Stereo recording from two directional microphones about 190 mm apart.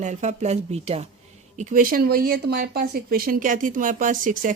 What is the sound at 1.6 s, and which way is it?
Speech, 45° right (ahead or behind).